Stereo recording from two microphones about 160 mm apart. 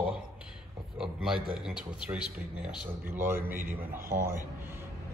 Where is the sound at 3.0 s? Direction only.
15° right (ahead or behind).